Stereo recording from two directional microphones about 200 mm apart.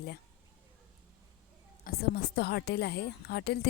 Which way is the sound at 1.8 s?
50° left (ahead or behind).